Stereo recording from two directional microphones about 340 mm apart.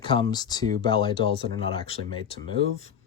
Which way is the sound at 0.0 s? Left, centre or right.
Centre.